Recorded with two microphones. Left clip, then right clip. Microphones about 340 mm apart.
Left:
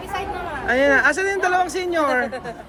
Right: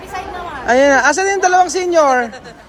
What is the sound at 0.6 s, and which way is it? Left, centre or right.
Speech, centre.